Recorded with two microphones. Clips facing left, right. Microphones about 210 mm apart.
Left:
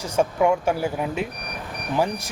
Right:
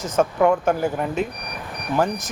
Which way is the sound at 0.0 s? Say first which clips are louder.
Right 2 dB; 10° left (ahead or behind).